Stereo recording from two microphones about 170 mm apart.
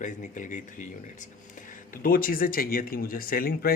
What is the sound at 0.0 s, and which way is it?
Speech, 50° left (ahead or behind).